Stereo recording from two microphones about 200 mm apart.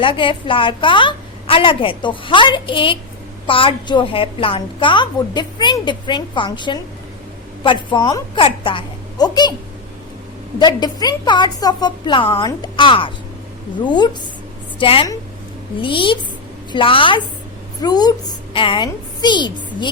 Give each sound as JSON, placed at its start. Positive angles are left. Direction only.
{"t": 0.0, "sound": "a woman's voice", "side_deg": 25}
{"t": 10.6, "sound": "a woman's voice", "side_deg": 20}